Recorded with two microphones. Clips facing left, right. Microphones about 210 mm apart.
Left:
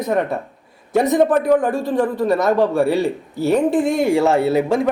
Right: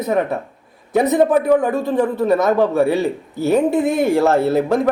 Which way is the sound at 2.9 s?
20° right (ahead or behind).